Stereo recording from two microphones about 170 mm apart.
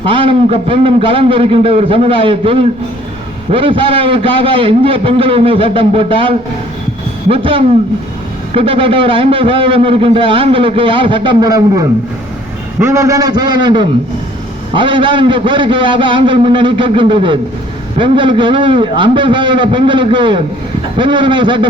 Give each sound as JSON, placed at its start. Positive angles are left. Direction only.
{"t": 0.1, "sound": "a man's voice", "side_deg": -30}